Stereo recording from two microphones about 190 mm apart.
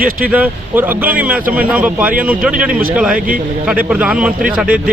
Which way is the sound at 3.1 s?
45° right (ahead or behind).